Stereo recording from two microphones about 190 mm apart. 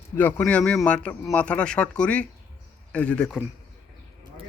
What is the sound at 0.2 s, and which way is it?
Speech, 10° left (ahead or behind).